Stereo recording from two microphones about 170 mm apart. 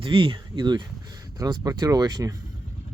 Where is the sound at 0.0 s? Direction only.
30° right (ahead or behind).